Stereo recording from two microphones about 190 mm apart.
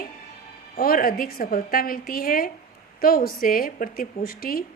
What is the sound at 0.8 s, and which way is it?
A woman's voice, 50° left (ahead or behind).